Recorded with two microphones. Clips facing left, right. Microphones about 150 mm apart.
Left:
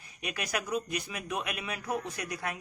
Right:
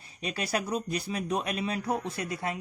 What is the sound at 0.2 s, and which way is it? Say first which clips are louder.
Speech: right 4 dB; 30° right (ahead or behind).